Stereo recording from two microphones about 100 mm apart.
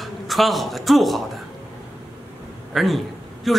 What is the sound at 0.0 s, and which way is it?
A woman's voice, centre (ahead or behind).